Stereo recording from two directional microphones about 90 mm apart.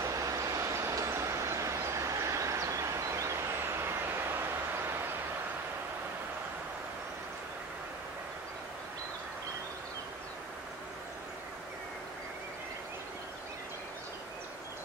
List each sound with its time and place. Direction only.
0.0 s vehicle: 40° right (ahead or behind)